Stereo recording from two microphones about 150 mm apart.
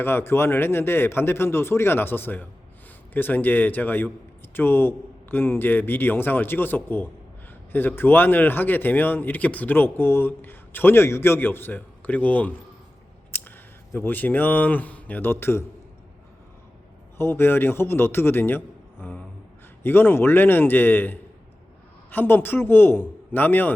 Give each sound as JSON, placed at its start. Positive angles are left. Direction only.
{"t": 0.0, "sound": "a man's voice", "side_deg": 15}
{"t": 13.3, "sound": "a sound", "side_deg": 15}
{"t": 13.9, "sound": "a man's voice", "side_deg": 10}
{"t": 17.2, "sound": "a man's voice", "side_deg": 15}